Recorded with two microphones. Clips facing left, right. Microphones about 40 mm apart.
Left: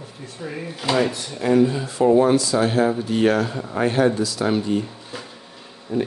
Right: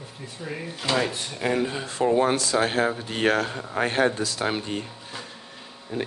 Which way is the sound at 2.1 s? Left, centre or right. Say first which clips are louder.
Left 5 dB; right.